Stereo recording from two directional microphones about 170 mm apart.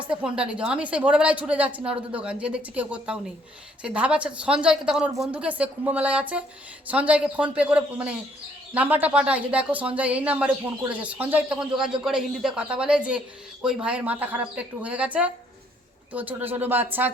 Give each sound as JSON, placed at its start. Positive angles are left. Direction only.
{"t": 0.1, "sound": "speech", "side_deg": -5}